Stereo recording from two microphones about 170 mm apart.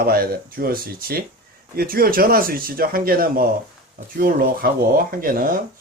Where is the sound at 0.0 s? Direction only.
60° right (ahead or behind).